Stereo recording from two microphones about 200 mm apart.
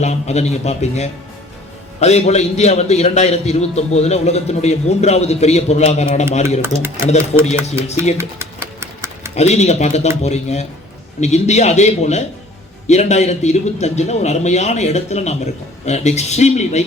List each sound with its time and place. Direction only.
0.0 s a man's voice: 35° left (ahead or behind)
8.2 s a sound: 15° right (ahead or behind)
9.3 s a man's voice: 35° left (ahead or behind)